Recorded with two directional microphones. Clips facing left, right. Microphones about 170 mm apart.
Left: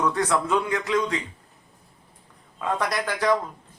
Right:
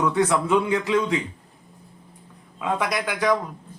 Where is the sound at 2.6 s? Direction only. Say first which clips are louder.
Right 1 dB; 5° right (ahead or behind).